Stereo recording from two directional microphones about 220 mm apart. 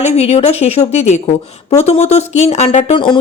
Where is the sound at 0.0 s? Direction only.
30° left (ahead or behind).